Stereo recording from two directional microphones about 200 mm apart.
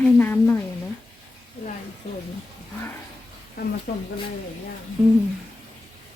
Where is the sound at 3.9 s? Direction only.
50° left (ahead or behind).